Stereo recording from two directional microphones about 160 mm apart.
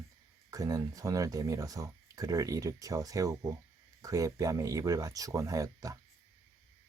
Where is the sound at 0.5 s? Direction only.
20° right (ahead or behind).